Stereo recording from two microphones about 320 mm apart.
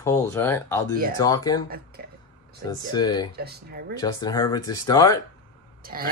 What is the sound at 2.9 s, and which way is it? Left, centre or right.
Speech, centre.